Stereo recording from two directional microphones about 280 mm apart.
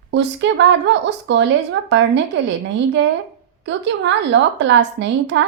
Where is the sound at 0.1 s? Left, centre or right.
Right.